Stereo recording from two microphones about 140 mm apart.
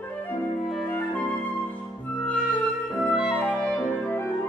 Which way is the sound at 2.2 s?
Centre (ahead or behind).